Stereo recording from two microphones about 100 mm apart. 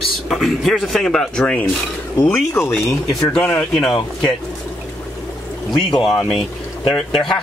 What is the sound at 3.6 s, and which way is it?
Speech, 5° left (ahead or behind).